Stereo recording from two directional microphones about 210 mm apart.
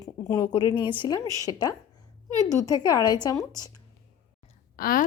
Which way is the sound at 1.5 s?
20° left (ahead or behind).